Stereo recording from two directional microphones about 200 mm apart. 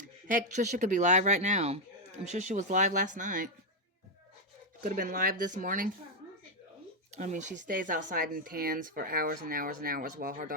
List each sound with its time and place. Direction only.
0.3 s speech: 40° right (ahead or behind)
4.8 s speech: 45° right (ahead or behind)
7.1 s speech: 35° right (ahead or behind)